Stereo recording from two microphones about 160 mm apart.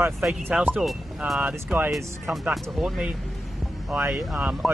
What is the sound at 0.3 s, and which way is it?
Speech, 10° right (ahead or behind).